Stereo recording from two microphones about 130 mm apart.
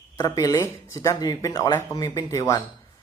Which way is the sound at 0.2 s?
25° left (ahead or behind).